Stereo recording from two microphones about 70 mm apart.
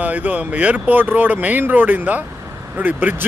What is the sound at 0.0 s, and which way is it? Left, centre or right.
Speech, right.